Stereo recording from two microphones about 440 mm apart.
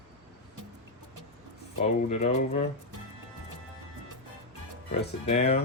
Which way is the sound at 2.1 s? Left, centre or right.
Centre.